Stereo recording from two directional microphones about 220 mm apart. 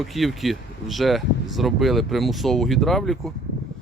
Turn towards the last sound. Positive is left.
turn(degrees=0)  # may be behind; listen again after turning